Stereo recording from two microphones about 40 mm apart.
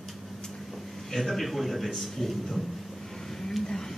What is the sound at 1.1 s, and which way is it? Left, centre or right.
A man's voice, centre.